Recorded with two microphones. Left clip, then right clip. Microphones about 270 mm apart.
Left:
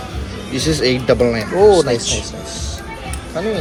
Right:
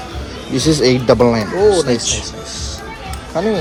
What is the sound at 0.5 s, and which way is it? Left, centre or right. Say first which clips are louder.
Speech: right 3 dB; right.